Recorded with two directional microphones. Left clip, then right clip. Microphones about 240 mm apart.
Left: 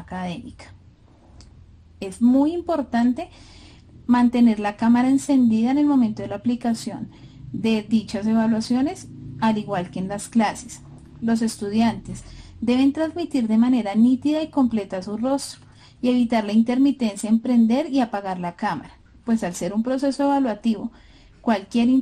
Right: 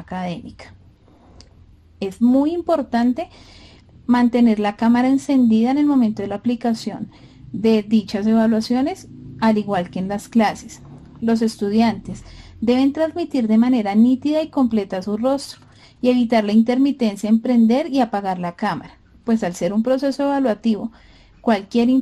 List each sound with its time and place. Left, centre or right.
0.1 s speech: right
2.0 s speech: right